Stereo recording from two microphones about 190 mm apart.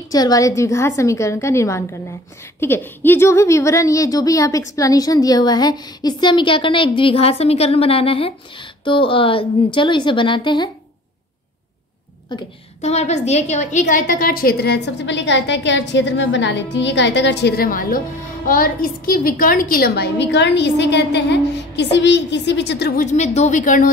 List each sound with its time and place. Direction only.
0.1 s a woman's voice: 20° left (ahead or behind)
12.8 s a woman's voice: 35° left (ahead or behind); by 23.0 s 55° left (ahead or behind)
23.0 s speech: 35° left (ahead or behind)